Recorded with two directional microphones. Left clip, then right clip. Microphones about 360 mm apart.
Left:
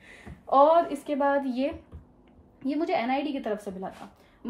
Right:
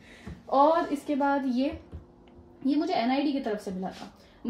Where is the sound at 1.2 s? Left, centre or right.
Centre.